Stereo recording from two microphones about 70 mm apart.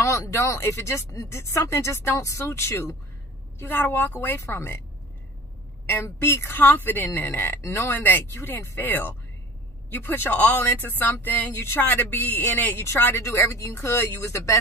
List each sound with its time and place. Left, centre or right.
0.0 s speech: left
6.2 s speech: left
6.6 s speech: left
13.5 s speech: left